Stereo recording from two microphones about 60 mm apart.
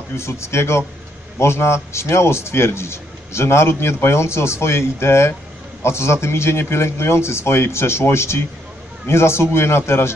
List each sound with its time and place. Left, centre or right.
0.1 s a man's voice: left